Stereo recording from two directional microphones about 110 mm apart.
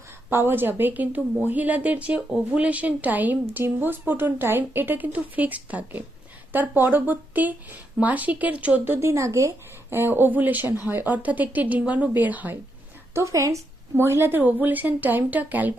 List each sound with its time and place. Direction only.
0.3 s a woman's voice: 20° right (ahead or behind)
13.1 s a woman's voice: 30° right (ahead or behind)